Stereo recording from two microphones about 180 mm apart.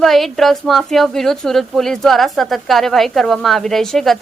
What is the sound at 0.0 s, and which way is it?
Speech, centre (ahead or behind).